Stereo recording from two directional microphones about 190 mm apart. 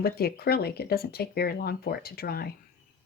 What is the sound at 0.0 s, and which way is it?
Speech, 55° left (ahead or behind).